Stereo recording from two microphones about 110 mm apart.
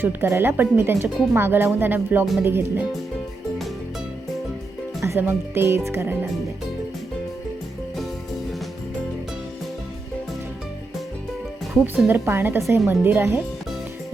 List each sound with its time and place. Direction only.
0.0 s speech: 20° right (ahead or behind)
4.9 s speech: 25° right (ahead or behind)
12.0 s speech: 20° right (ahead or behind)